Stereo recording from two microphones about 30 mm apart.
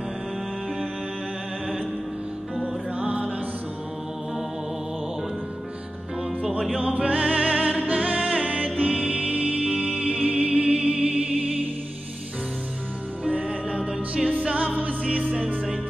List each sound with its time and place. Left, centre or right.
3.0 s music: right
6.8 s music: right
13.3 s music: right
14.4 s music: right